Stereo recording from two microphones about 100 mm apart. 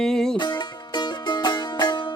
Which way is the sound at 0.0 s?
5° left (ahead or behind).